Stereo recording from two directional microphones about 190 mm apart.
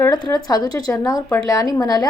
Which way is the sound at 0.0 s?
20° left (ahead or behind).